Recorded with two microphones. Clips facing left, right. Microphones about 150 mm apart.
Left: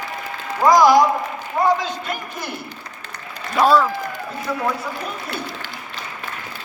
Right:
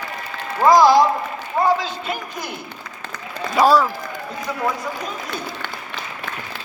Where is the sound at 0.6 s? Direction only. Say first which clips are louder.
Even; 25° right (ahead or behind).